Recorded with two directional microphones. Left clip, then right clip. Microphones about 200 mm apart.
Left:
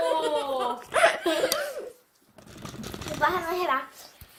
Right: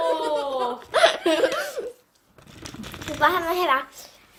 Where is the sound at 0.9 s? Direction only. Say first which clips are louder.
Right 4 dB; 25° right (ahead or behind).